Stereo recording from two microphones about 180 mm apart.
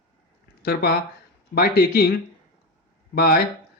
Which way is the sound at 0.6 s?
60° left (ahead or behind).